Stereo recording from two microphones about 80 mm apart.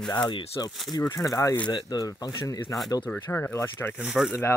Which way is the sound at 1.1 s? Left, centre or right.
Left.